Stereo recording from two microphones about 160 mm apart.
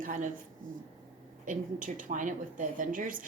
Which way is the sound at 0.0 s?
55° right (ahead or behind).